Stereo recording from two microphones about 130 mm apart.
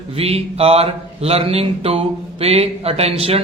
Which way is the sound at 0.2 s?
50° right (ahead or behind).